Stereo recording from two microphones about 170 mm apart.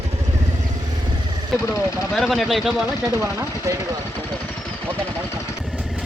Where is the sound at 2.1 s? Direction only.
Centre (ahead or behind).